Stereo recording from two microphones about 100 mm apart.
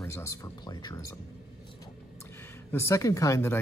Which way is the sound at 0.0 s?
30° left (ahead or behind).